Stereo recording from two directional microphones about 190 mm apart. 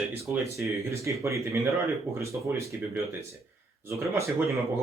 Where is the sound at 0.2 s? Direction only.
15° right (ahead or behind).